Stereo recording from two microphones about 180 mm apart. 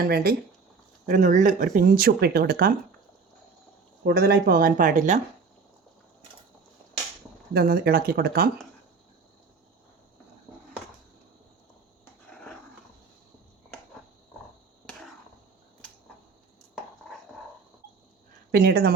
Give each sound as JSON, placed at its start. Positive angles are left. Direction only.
{"t": 0.0, "sound": "speech", "side_deg": -60}
{"t": 1.0, "sound": "speech", "side_deg": -45}
{"t": 4.0, "sound": "speech", "side_deg": -60}
{"t": 7.5, "sound": "speech", "side_deg": -60}
{"t": 14.8, "sound": "chop", "side_deg": 0}
{"t": 18.5, "sound": "speech", "side_deg": -60}